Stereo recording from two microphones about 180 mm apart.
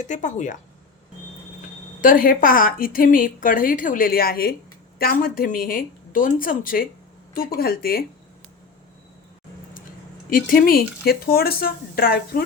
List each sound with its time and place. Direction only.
0.0 s a woman's voice: 40° left (ahead or behind)
2.0 s a woman's voice: 50° left (ahead or behind)
10.2 s speech: 50° left (ahead or behind)